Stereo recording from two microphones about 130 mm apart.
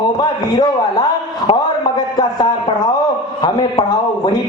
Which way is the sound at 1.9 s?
30° left (ahead or behind).